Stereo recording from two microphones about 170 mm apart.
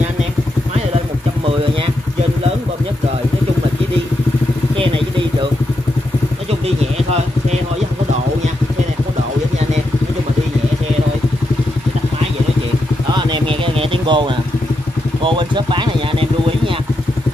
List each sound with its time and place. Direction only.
13.1 s vehicle: 25° right (ahead or behind)